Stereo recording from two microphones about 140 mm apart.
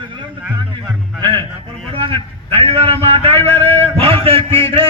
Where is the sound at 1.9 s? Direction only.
40° right (ahead or behind).